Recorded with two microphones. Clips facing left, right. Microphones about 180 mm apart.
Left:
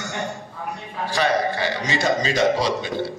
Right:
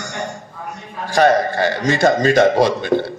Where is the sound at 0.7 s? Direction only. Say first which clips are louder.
Right 6 dB; 50° right (ahead or behind).